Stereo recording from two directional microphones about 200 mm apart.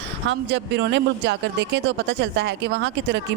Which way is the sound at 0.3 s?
65° right (ahead or behind).